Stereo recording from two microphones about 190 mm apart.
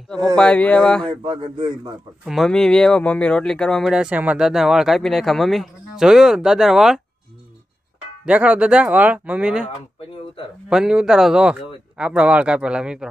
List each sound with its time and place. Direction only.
0.4 s speech: 5° left (ahead or behind)
1.0 s speech: 30° right (ahead or behind)
2.2 s speech: centre (ahead or behind)
8.3 s speech: 5° right (ahead or behind)
9.9 s speech: 30° left (ahead or behind)
10.7 s speech: 5° right (ahead or behind)